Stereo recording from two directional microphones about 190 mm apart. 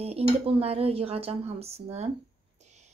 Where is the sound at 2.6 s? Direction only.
35° right (ahead or behind).